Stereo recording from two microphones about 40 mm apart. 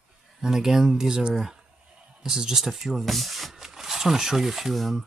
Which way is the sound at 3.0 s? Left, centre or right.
Centre.